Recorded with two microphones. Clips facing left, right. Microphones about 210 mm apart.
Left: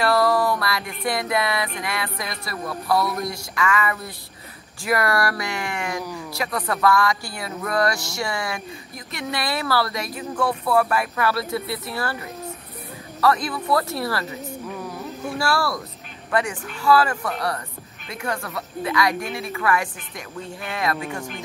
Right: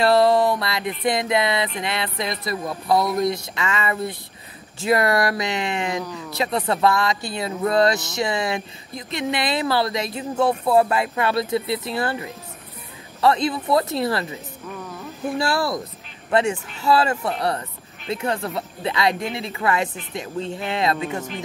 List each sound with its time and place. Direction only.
0.0 s music: 25° right (ahead or behind)
1.8 s speech: 25° right (ahead or behind)
15.3 s speech: 20° right (ahead or behind)